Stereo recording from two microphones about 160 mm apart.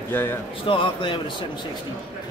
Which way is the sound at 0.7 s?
30° left (ahead or behind).